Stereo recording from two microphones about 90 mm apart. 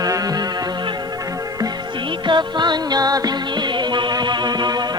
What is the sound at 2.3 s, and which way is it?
Music, 60° right (ahead or behind).